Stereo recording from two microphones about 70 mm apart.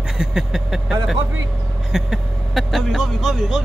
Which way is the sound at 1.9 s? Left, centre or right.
Centre.